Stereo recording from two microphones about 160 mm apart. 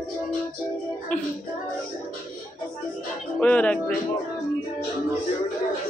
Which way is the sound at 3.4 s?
10° left (ahead or behind).